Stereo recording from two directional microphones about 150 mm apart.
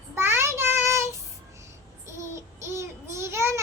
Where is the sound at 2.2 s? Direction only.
20° right (ahead or behind).